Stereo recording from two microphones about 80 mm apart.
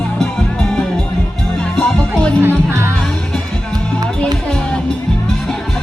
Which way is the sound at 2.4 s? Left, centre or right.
Right.